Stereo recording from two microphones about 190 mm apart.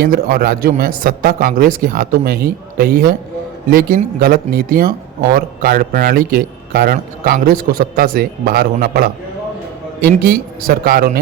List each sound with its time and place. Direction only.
0.0 s speech: 55° right (ahead or behind)